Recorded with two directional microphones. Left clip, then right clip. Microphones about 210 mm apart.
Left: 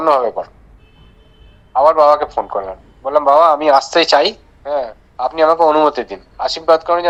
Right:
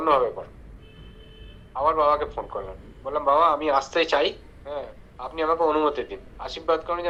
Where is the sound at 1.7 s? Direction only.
65° left (ahead or behind).